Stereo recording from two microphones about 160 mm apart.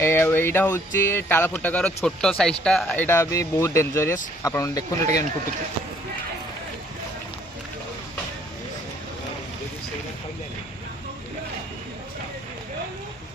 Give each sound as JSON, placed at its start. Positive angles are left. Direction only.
{"t": 0.0, "sound": "speech", "side_deg": 15}